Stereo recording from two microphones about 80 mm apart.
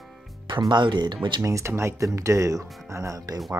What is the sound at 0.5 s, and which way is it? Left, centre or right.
Speech, right.